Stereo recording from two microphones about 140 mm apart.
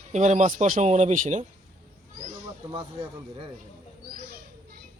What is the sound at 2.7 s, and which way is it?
Speech, 40° right (ahead or behind).